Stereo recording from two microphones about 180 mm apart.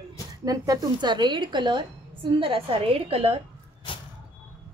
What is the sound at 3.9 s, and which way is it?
Vehicle, 30° left (ahead or behind).